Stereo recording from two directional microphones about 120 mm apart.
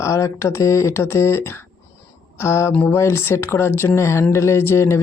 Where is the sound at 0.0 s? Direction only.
25° left (ahead or behind).